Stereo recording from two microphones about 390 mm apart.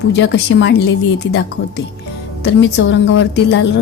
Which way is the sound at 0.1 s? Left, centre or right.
Left.